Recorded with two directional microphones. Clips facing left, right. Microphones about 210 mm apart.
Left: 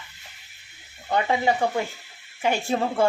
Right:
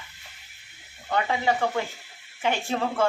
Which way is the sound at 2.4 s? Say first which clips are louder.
Left 3 dB; 10° left (ahead or behind).